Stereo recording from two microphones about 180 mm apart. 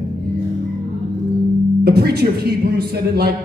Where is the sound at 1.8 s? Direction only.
65° right (ahead or behind).